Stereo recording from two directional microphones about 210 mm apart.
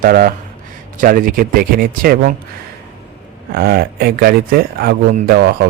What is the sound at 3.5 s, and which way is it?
Speech, 45° right (ahead or behind).